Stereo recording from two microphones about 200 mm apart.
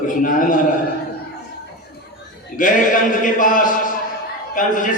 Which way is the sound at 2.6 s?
40° left (ahead or behind).